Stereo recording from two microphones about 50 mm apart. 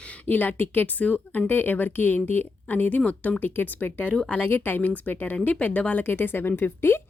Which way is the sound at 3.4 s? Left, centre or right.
Left.